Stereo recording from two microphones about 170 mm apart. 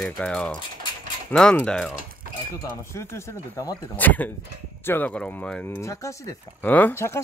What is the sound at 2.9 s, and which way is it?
Speech, 15° left (ahead or behind).